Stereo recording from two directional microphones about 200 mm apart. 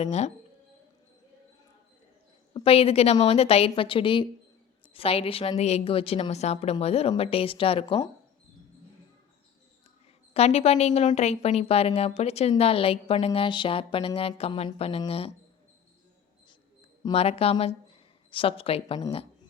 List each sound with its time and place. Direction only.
0.0 s speech: 35° left (ahead or behind)
2.5 s a woman's voice: 30° left (ahead or behind)
10.3 s speech: 30° left (ahead or behind)
17.0 s a woman's voice: 25° left (ahead or behind)